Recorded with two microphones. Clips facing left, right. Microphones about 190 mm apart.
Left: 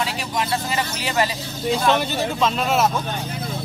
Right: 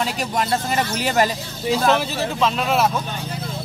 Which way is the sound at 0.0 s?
45° right (ahead or behind).